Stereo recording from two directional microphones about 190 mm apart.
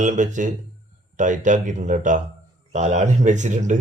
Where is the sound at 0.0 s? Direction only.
40° right (ahead or behind).